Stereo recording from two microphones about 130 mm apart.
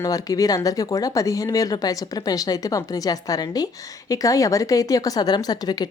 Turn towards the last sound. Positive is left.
turn(degrees=30)  # may be behind; listen again after turning